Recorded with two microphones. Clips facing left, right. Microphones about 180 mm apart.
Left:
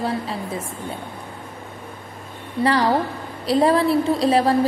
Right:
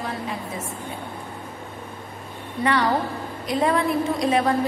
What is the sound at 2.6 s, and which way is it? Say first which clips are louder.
A woman's voice: left 3 dB; 35° left (ahead or behind).